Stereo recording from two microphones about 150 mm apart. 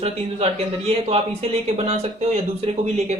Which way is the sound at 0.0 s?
45° right (ahead or behind).